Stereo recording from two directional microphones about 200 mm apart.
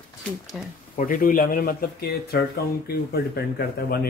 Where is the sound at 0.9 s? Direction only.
45° left (ahead or behind).